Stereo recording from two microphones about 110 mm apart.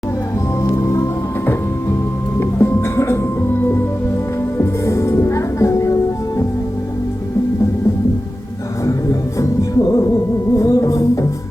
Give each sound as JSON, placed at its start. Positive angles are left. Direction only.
{"t": 0.6, "sound": "music", "side_deg": 30}
{"t": 2.4, "sound": "music", "side_deg": 20}
{"t": 8.9, "sound": "music", "side_deg": 30}